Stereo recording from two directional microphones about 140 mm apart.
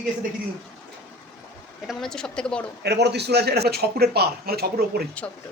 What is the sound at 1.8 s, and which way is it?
Speech, 5° left (ahead or behind).